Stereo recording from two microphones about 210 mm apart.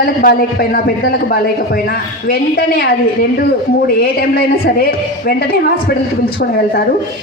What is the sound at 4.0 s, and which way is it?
A man's voice, 45° left (ahead or behind).